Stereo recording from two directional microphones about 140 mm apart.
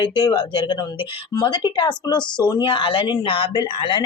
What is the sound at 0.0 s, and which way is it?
Speech, 35° left (ahead or behind).